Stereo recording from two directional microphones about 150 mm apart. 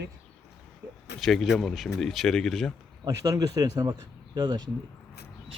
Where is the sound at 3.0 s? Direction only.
20° right (ahead or behind).